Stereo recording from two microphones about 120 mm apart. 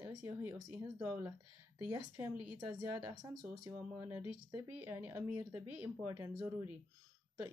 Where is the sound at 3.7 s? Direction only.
20° right (ahead or behind).